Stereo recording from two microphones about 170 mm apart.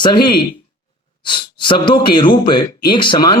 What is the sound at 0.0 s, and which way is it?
Speech, 25° left (ahead or behind).